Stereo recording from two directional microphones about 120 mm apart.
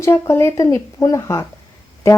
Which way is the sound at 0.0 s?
20° left (ahead or behind).